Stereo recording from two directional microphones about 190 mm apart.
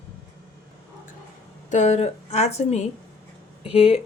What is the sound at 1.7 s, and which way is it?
A woman's voice, 35° left (ahead or behind).